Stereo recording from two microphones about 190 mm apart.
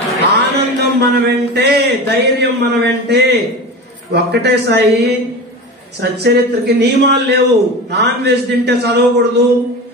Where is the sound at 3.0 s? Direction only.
60° right (ahead or behind).